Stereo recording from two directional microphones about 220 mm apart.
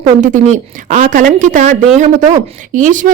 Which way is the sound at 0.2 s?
35° right (ahead or behind).